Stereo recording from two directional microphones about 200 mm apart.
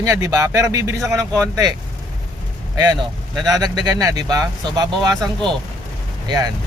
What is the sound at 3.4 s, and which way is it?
Speech, 20° right (ahead or behind).